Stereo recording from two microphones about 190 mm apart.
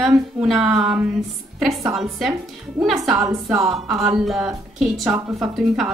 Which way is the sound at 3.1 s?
15° right (ahead or behind).